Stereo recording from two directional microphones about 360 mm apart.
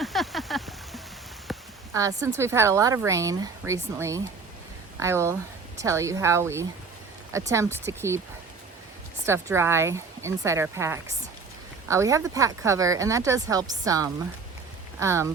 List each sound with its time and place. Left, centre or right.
0.0 s a sound: centre
1.5 s speech: centre
9.2 s speech: centre